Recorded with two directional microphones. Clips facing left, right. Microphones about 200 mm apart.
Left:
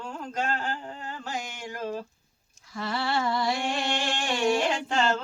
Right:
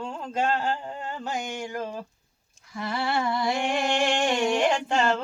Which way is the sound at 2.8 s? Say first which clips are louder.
Right 1 dB; 20° right (ahead or behind).